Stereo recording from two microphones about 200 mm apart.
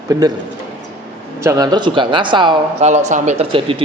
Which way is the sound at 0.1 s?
20° right (ahead or behind).